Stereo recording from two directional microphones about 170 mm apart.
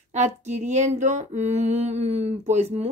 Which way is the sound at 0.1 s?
45° right (ahead or behind).